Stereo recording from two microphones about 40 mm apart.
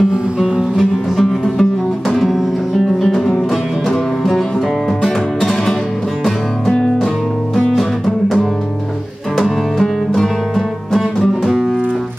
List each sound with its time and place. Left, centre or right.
0.1 s music: centre
0.7 s music: centre
2.2 s music: centre
9.8 s music: centre